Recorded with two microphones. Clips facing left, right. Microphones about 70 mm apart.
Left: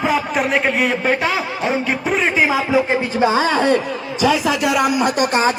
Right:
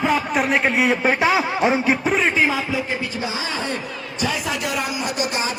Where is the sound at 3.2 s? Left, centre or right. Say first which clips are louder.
Left 11 dB; left.